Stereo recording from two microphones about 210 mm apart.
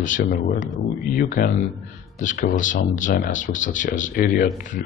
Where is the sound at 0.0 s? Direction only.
40° left (ahead or behind).